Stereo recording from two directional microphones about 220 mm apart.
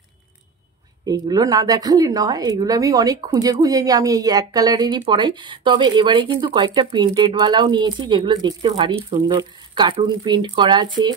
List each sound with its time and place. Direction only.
1.0 s speech: 20° right (ahead or behind)